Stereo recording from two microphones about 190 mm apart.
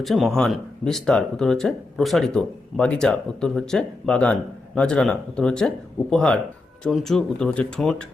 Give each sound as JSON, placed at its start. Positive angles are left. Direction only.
{"t": 0.0, "sound": "speech", "side_deg": 0}